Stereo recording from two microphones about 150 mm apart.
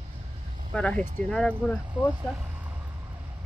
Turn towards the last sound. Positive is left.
turn(degrees=-10)  # may be behind; listen again after turning